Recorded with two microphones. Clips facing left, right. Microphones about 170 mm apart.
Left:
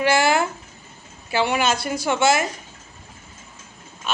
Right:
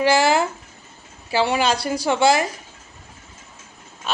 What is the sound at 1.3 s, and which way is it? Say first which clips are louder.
Speech: right 1 dB; 30° right (ahead or behind).